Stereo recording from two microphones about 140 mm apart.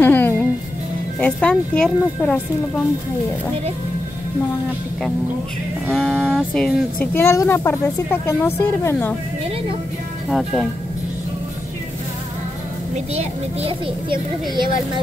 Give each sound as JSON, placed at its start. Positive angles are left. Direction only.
{"t": 0.0, "sound": "music", "side_deg": 15}
{"t": 1.2, "sound": "speech", "side_deg": 10}
{"t": 5.9, "sound": "speech", "side_deg": 5}
{"t": 10.3, "sound": "speech", "side_deg": 0}
{"t": 12.9, "sound": "a child's voice", "side_deg": -50}